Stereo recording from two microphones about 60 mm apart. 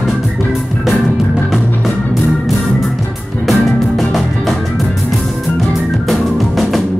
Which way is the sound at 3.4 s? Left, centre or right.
Centre.